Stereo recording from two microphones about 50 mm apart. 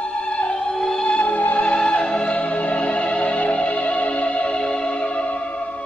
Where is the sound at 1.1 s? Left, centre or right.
Left.